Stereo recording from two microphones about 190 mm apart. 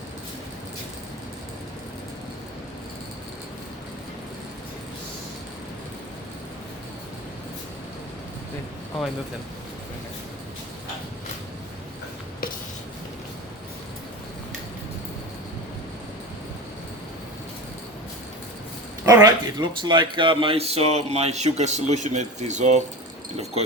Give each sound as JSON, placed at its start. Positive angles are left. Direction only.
{"t": 19.0, "sound": "speech", "side_deg": -20}